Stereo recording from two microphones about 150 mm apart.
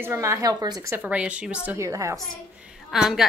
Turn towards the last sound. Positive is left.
turn(degrees=-5)  # may be behind; listen again after turning